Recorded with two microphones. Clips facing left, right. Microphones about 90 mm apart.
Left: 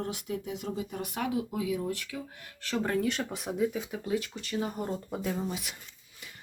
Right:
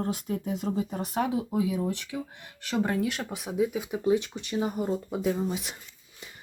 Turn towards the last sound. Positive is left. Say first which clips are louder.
# right 4 dB
turn(degrees=-25)  # may be behind; listen again after turning